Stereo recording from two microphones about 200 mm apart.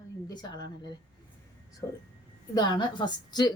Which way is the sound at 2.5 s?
20° left (ahead or behind).